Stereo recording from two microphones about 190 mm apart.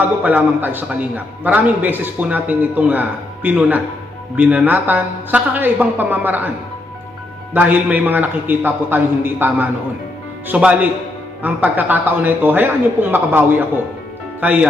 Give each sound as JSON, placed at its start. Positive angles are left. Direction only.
{"t": 0.0, "sound": "a man's voice", "side_deg": -10}
{"t": 7.5, "sound": "a man's voice", "side_deg": -10}